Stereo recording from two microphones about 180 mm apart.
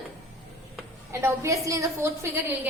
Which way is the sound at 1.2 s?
15° right (ahead or behind).